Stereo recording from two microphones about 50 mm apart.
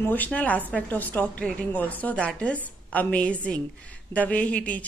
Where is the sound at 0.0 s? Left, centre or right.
Left.